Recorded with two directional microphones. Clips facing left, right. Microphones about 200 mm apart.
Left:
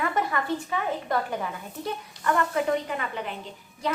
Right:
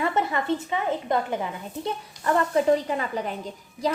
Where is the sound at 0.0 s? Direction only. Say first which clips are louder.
Right 2 dB; 25° right (ahead or behind).